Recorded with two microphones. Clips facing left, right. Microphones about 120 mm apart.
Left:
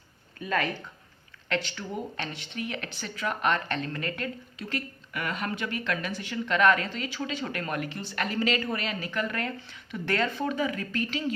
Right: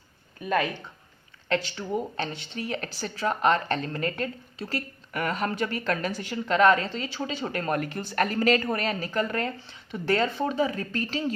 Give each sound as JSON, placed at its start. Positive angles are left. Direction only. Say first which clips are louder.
{"t": 0.4, "sound": "speech", "louder": "right 3 dB", "side_deg": -15}
{"t": 1.5, "sound": "speech", "louder": "right 4 dB", "side_deg": -35}